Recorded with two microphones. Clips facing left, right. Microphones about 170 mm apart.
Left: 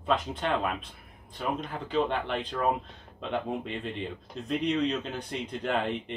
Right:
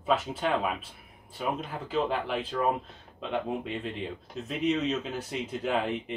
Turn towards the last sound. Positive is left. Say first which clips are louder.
# even
turn(degrees=-5)  # may be behind; listen again after turning